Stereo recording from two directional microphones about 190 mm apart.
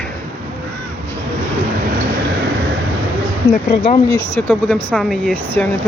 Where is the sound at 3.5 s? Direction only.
40° left (ahead or behind).